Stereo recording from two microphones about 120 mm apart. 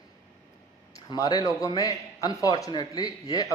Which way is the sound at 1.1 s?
35° left (ahead or behind).